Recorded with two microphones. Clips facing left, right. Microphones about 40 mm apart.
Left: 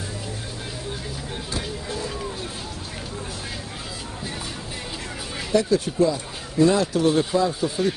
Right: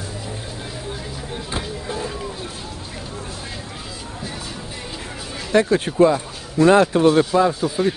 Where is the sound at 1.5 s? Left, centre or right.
Right.